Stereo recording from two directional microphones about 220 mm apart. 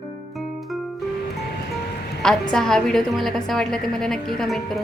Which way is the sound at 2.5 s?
Centre (ahead or behind).